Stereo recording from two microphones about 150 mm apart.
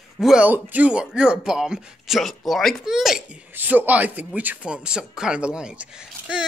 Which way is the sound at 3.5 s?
10° right (ahead or behind).